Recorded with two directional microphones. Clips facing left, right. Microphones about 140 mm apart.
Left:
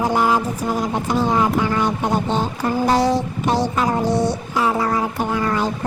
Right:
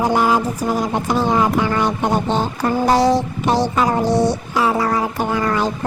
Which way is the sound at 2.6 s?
85° right.